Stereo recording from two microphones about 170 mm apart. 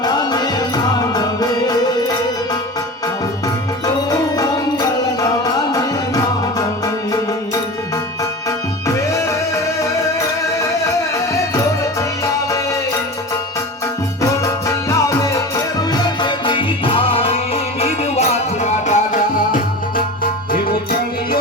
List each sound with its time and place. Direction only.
0.0 s music: 25° left (ahead or behind)
4.1 s music: 20° left (ahead or behind)
8.2 s music: 20° left (ahead or behind)
11.3 s music: 20° left (ahead or behind)
14.2 s music: 20° left (ahead or behind); by 19.5 s 45° left (ahead or behind)